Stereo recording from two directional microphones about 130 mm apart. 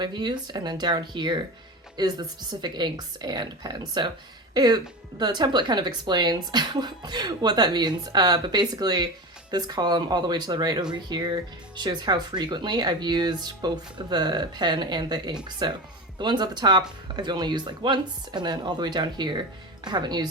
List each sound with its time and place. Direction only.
0.0 s speech: 35° right (ahead or behind)